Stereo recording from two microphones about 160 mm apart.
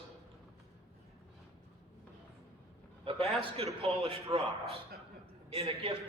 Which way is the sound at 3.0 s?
35° right (ahead or behind).